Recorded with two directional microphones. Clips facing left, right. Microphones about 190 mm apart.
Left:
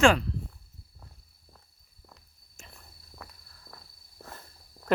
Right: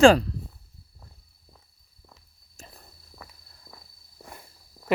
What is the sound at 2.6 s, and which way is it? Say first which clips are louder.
Walk: right 4 dB; 35° right (ahead or behind).